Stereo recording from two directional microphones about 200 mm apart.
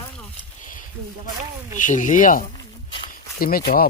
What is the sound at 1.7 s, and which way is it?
Speech, 40° left (ahead or behind).